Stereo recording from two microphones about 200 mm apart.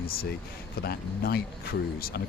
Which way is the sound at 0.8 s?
50° left (ahead or behind).